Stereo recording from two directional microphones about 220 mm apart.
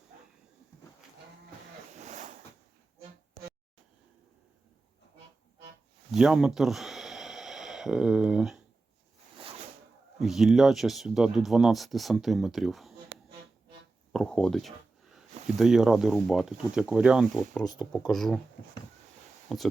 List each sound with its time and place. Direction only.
2.0 s a sound: 35° right (ahead or behind)
6.1 s snort: centre (ahead or behind)
10.2 s speech: centre (ahead or behind)
14.1 s speech: centre (ahead or behind)
19.5 s speech: centre (ahead or behind)